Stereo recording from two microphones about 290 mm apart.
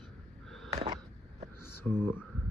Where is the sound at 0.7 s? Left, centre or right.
Centre.